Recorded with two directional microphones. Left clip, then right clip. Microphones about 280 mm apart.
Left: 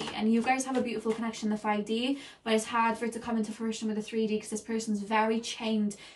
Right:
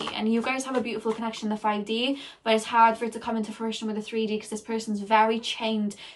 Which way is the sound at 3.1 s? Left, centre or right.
Centre.